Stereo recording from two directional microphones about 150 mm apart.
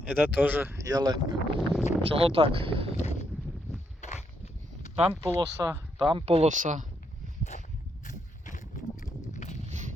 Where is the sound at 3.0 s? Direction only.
45° left (ahead or behind).